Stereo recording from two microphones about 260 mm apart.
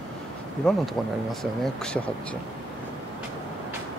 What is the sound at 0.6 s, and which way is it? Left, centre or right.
Speech, centre.